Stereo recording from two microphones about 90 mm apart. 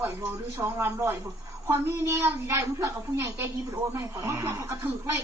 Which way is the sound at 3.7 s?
40° right (ahead or behind).